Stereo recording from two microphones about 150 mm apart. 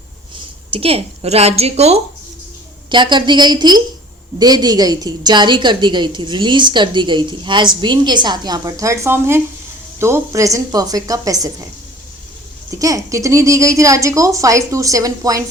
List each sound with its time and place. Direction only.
0.7 s a woman's voice: 40° right (ahead or behind)
2.9 s a woman's voice: 30° right (ahead or behind)
12.8 s a woman's voice: 20° right (ahead or behind)